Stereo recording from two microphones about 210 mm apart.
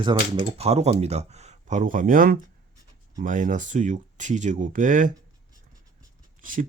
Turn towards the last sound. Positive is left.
turn(degrees=-40)  # may be behind; listen again after turning